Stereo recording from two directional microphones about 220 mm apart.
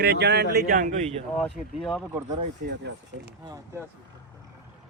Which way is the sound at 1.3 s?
Centre (ahead or behind).